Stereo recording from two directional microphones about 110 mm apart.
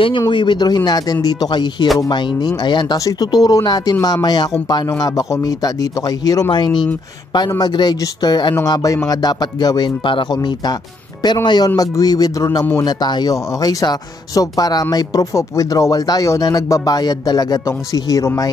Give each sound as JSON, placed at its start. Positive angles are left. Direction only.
{"t": 0.3, "sound": "speech", "side_deg": 45}